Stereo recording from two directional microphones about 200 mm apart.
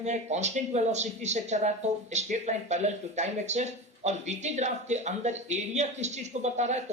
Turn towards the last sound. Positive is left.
turn(degrees=-35)  # may be behind; listen again after turning